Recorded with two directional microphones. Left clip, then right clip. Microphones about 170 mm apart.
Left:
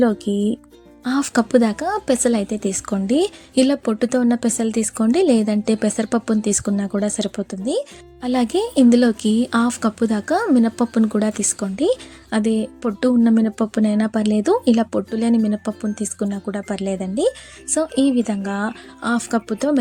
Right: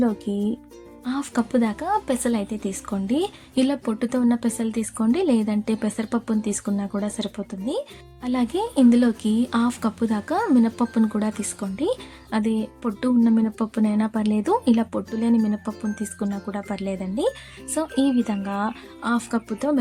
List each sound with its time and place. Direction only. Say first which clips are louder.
0.0 s a woman's voice: left 6 dB; 30° left (ahead or behind)